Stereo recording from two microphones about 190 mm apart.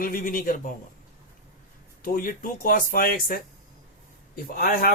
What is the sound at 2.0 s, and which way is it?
Speech, 50° left (ahead or behind).